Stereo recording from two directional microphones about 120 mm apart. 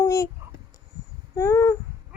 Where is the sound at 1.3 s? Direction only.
25° left (ahead or behind).